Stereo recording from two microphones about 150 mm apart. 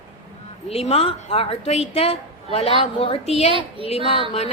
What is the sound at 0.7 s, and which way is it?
A woman's voice, 40° left (ahead or behind).